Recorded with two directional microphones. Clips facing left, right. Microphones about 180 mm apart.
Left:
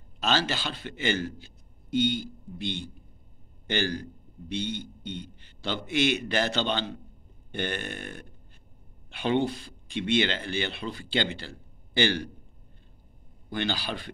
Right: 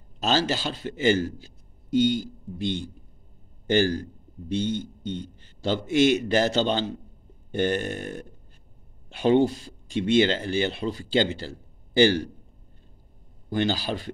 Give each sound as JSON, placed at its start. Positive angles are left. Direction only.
{"t": 0.2, "sound": "a man's voice", "side_deg": -40}
{"t": 13.5, "sound": "speech", "side_deg": -40}